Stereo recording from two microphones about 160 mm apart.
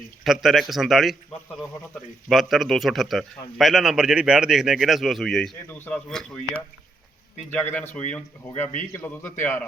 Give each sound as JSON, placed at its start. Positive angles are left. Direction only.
{"t": 0.3, "sound": "a man's voice", "side_deg": 0}
{"t": 7.5, "sound": "speech", "side_deg": 10}
{"t": 8.5, "sound": "speech", "side_deg": 50}
{"t": 9.0, "sound": "speech", "side_deg": 15}